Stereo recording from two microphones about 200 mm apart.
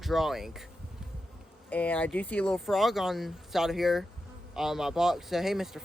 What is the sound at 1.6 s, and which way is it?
Speech, 5° left (ahead or behind).